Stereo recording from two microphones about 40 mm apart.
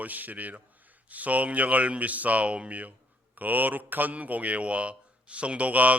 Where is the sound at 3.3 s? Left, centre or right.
Right.